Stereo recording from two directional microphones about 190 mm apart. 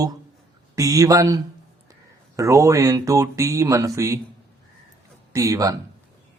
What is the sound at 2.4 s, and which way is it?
Speech, 15° right (ahead or behind).